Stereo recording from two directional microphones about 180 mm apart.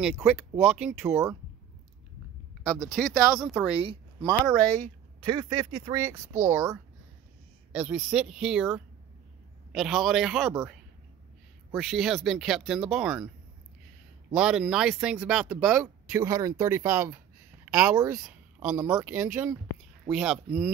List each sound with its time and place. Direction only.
0.0 s speech: 5° right (ahead or behind)
2.9 s speech: 5° left (ahead or behind)
3.8 s speech: 30° right (ahead or behind)
4.6 s speech: 5° left (ahead or behind)
5.2 s speech: 25° right (ahead or behind); by 10.5 s centre (ahead or behind)
11.7 s speech: centre (ahead or behind)
14.3 s speech: 5° right (ahead or behind)
18.2 s a sound: 5° right (ahead or behind)
18.9 s speech: 10° right (ahead or behind)